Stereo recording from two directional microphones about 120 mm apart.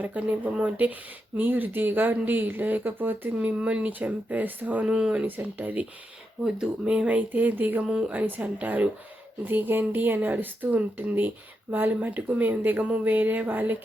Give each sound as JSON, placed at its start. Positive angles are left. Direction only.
{"t": 0.0, "sound": "speech", "side_deg": -15}